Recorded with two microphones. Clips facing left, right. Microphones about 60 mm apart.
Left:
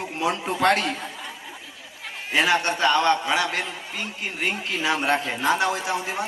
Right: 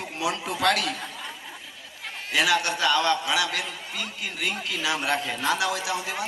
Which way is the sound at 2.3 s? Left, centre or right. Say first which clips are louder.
Left 2 dB; left.